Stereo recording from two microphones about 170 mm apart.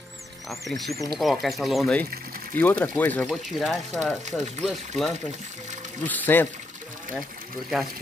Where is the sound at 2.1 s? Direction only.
60° right (ahead or behind).